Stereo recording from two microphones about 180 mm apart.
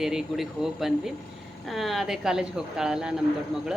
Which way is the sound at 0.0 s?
Centre (ahead or behind).